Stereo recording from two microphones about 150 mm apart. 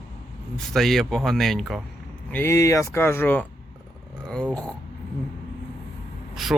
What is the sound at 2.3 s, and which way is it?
Speech, 20° left (ahead or behind).